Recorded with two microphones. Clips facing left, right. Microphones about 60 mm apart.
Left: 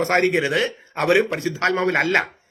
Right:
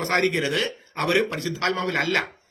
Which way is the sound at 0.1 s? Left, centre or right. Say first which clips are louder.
Left 1 dB; left.